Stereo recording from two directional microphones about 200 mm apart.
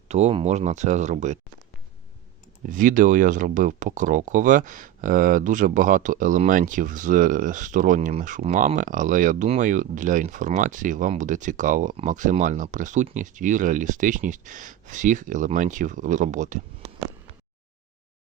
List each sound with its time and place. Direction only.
0.1 s speech: 30° right (ahead or behind)
2.6 s speech: 40° right (ahead or behind)